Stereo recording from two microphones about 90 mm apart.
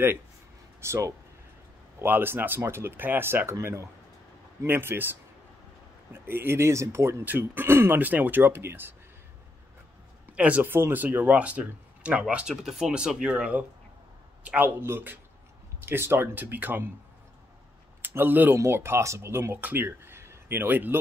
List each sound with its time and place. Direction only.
0.7 s speech: 30° right (ahead or behind)
4.6 s speech: 25° right (ahead or behind)
10.3 s speech: 15° right (ahead or behind)
14.8 s speech: 25° right (ahead or behind)
18.0 s speech: 20° right (ahead or behind)